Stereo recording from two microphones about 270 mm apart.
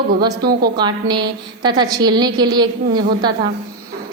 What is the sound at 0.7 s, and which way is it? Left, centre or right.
A woman's voice, centre.